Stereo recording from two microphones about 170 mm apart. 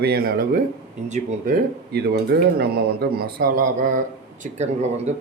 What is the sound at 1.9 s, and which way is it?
Speech, 75° right (ahead or behind).